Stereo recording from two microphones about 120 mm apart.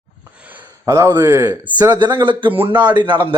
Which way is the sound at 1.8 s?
35° right (ahead or behind).